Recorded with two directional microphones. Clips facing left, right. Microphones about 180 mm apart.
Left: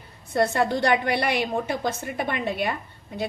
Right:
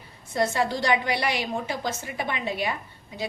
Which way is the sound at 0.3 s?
60° left (ahead or behind).